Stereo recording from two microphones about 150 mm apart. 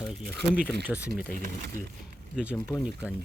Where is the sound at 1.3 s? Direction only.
60° right (ahead or behind).